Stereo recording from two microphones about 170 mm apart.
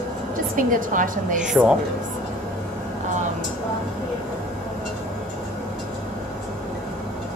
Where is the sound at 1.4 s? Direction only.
5° right (ahead or behind).